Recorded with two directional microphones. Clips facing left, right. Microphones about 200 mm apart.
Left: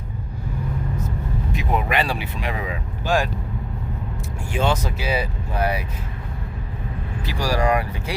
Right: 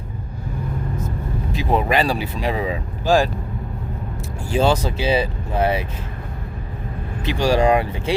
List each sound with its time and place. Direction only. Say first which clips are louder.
1.5 s speech: right 4 dB; 35° right (ahead or behind)
4.5 s speech: right 5 dB; 35° right (ahead or behind)
7.2 s speech: right 6 dB; 25° right (ahead or behind)